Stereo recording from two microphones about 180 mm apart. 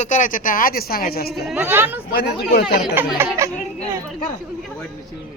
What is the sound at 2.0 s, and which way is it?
Speech, 60° left (ahead or behind).